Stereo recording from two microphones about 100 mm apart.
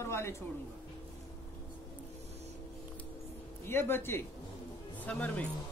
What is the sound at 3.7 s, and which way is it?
Speech, 25° left (ahead or behind).